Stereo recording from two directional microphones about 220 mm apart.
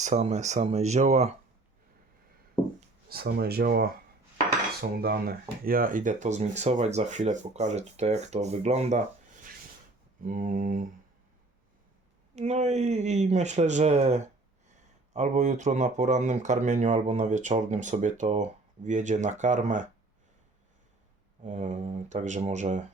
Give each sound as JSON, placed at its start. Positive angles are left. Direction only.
{"t": 0.0, "sound": "speech", "side_deg": -30}
{"t": 3.1, "sound": "speech", "side_deg": -45}
{"t": 10.2, "sound": "speech", "side_deg": -40}
{"t": 12.4, "sound": "speech", "side_deg": -30}
{"t": 21.4, "sound": "speech", "side_deg": -35}